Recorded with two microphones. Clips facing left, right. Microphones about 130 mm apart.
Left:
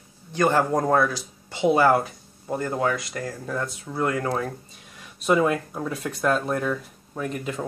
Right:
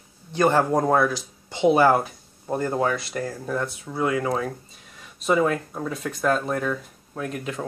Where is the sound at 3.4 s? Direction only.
5° right (ahead or behind).